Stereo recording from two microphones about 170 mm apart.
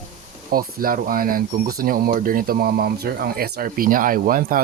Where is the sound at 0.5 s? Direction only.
55° right (ahead or behind).